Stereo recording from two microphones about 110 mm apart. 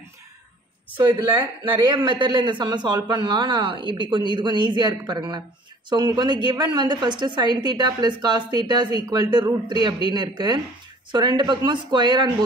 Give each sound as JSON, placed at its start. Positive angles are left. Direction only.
{"t": 0.9, "sound": "a man's voice", "side_deg": -50}